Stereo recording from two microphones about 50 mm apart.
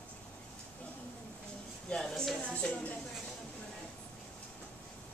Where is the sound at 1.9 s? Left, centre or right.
Centre.